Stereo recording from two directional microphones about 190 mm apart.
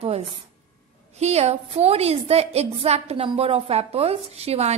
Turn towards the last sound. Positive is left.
turn(degrees=-35)  # may be behind; listen again after turning